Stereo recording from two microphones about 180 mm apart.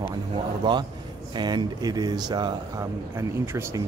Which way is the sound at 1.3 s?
25° right (ahead or behind).